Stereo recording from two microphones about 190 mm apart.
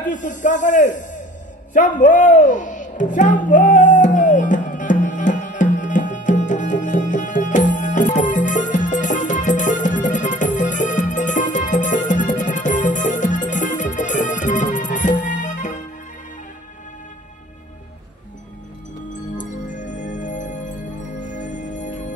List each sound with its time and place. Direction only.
0.1 s a man's voice: 40° left (ahead or behind)
1.7 s a sound: 40° left (ahead or behind)
19.3 s music: 40° left (ahead or behind)